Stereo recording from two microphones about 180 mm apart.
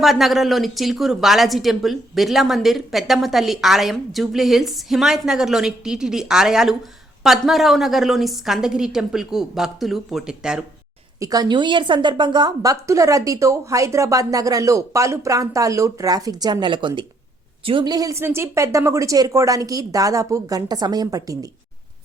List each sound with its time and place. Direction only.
0.0 s a woman's voice: centre (ahead or behind)
11.2 s a woman's voice: 20° right (ahead or behind)